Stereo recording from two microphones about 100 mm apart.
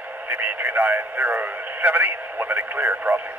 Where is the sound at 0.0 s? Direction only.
20° right (ahead or behind).